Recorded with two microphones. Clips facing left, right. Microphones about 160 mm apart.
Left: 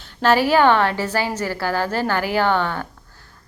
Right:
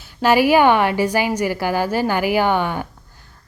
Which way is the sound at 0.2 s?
10° right (ahead or behind).